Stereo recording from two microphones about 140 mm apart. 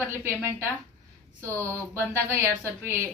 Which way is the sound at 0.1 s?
15° right (ahead or behind).